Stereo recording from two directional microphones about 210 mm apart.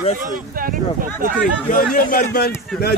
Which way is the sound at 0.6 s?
40° right (ahead or behind).